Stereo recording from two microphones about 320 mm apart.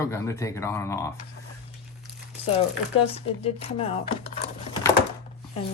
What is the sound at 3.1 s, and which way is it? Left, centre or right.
Speech, centre.